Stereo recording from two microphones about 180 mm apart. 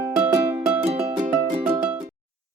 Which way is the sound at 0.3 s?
20° right (ahead or behind).